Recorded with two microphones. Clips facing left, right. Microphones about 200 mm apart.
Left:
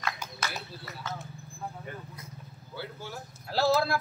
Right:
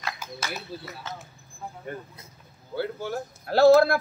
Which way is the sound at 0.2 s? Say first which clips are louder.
Right 3 dB; centre (ahead or behind).